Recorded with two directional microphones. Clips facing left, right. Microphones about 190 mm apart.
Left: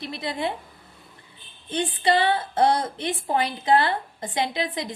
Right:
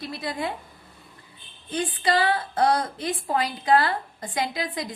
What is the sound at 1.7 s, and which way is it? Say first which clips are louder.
A woman's voice: left 2 dB; 25° left (ahead or behind).